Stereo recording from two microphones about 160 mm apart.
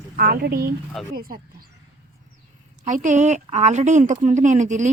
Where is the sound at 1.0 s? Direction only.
Centre (ahead or behind).